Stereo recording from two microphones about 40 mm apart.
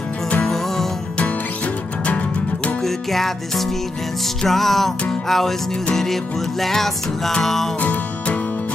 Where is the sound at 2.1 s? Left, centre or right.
Left.